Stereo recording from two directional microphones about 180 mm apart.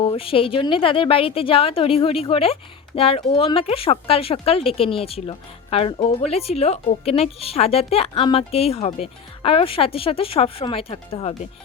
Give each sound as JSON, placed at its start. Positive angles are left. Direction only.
{"t": 0.0, "sound": "a woman's voice", "side_deg": 30}